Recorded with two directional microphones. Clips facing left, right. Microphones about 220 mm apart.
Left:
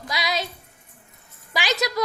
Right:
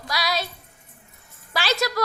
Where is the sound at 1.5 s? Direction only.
15° left (ahead or behind).